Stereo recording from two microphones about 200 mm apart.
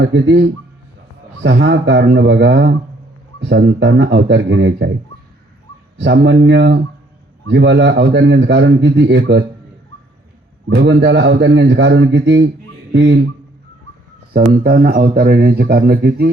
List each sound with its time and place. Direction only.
0.0 s a man's voice: 65° right (ahead or behind)
6.0 s a man's voice: 65° right (ahead or behind)
10.8 s a man's voice: 60° right (ahead or behind)
12.9 s a sound: 60° right (ahead or behind)
14.3 s speech: 50° right (ahead or behind)